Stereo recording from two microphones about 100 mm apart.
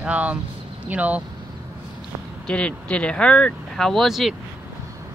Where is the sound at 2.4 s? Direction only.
10° left (ahead or behind).